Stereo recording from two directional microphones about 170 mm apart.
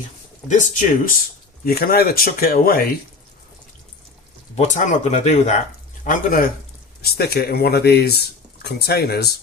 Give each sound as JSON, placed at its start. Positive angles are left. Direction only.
{"t": 0.4, "sound": "speech", "side_deg": 50}
{"t": 1.6, "sound": "speech", "side_deg": 60}
{"t": 4.5, "sound": "speech", "side_deg": 45}
{"t": 6.1, "sound": "speech", "side_deg": 55}
{"t": 7.0, "sound": "speech", "side_deg": 65}